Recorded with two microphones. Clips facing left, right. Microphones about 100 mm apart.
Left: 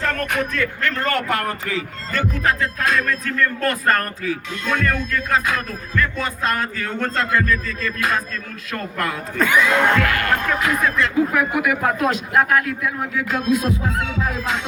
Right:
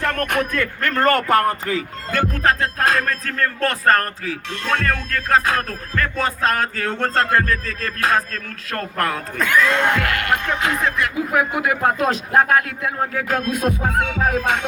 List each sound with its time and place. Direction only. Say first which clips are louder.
0.0 s speech: right 1 dB; 55° right (ahead or behind); by 1.8 s 40° right (ahead or behind)
2.4 s music: right 3 dB; 40° right (ahead or behind)
8.7 s speech: right 2 dB; 40° right (ahead or behind)
9.4 s music: even; 5° left (ahead or behind)
10.2 s a man's voice: even; 25° right (ahead or behind)
13.1 s music: left 2 dB; 50° right (ahead or behind)